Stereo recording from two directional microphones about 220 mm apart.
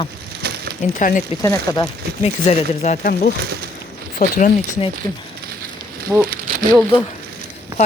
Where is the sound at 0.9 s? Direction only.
35° left (ahead or behind).